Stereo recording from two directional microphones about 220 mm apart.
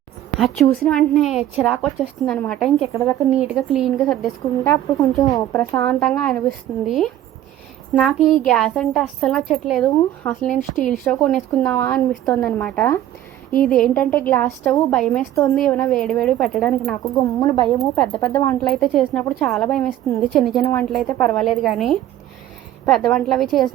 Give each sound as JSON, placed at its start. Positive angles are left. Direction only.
{"t": 0.3, "sound": "a woman's voice", "side_deg": 0}
{"t": 3.2, "sound": "a woman's voice", "side_deg": -5}
{"t": 17.4, "sound": "a woman's voice", "side_deg": 20}
{"t": 17.7, "sound": "a woman's voice", "side_deg": 0}